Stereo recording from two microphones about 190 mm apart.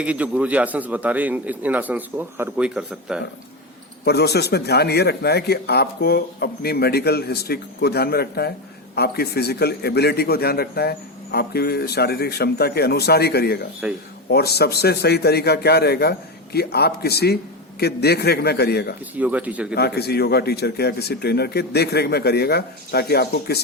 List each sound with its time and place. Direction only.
0.0 s a man's voice: 5° right (ahead or behind)
4.0 s a man's voice: 60° left (ahead or behind)
13.8 s a man's voice: 5° right (ahead or behind)
14.3 s a man's voice: 55° left (ahead or behind)
19.1 s a man's voice: 10° right (ahead or behind)
19.7 s a man's voice: 55° left (ahead or behind)